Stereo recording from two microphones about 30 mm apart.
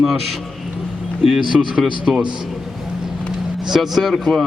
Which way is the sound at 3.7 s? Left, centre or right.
Centre.